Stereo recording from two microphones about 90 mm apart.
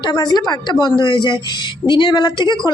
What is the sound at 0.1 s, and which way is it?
A woman's voice, 50° left (ahead or behind).